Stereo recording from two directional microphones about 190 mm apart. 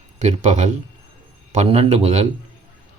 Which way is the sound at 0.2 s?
35° right (ahead or behind).